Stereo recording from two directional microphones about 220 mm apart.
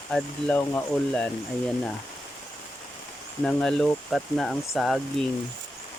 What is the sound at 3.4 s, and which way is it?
Speech, 5° left (ahead or behind).